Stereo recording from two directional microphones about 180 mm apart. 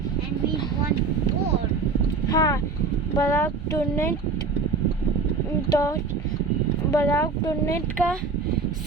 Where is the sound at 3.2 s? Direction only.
15° left (ahead or behind).